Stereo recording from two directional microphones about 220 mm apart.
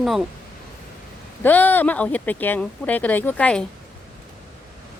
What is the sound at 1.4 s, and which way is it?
Speech, 10° left (ahead or behind).